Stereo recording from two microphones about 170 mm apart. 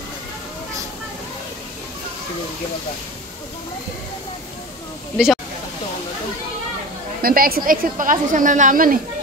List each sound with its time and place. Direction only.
5.1 s speech: 5° right (ahead or behind)
7.2 s a woman's voice: 60° right (ahead or behind)